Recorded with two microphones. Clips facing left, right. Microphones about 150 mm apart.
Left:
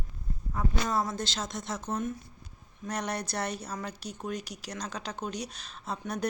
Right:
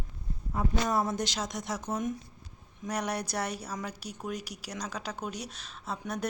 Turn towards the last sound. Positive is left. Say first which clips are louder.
# left 1 dB
turn(degrees=-5)  # may be behind; listen again after turning